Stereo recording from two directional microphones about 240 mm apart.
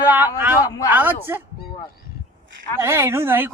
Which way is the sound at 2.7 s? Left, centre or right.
Centre.